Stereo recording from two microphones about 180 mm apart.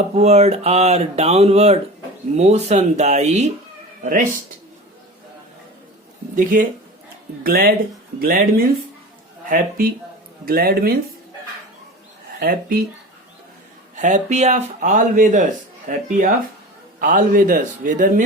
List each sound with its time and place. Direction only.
0.1 s speech: 35° right (ahead or behind)
4.0 s speech: 50° right (ahead or behind)
6.3 s speech: 50° right (ahead or behind)
12.4 s speech: 60° right (ahead or behind)
13.9 s speech: 40° right (ahead or behind)